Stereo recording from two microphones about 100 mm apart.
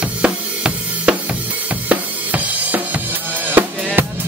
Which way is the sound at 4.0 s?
20° right (ahead or behind).